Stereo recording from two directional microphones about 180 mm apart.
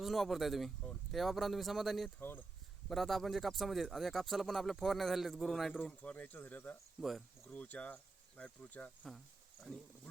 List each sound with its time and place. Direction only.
0.0 s speech: centre (ahead or behind)